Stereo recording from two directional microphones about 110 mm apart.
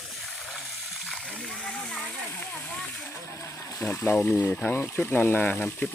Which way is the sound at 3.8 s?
25° left (ahead or behind).